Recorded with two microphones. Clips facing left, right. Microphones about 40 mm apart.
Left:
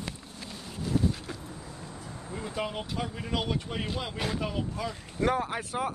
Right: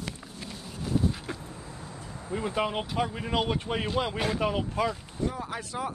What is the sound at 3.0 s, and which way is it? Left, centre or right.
Speech, centre.